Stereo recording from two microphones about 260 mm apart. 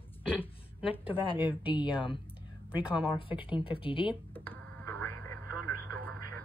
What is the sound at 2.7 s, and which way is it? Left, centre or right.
Speech, centre.